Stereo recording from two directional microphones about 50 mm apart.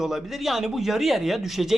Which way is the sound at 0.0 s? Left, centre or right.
Centre.